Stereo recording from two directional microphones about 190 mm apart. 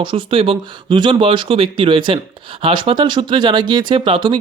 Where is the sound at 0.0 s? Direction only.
25° right (ahead or behind).